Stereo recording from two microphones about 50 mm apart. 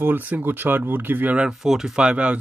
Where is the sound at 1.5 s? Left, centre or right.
Centre.